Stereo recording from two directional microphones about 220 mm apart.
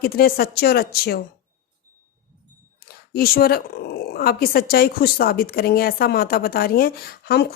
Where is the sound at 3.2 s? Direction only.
45° left (ahead or behind).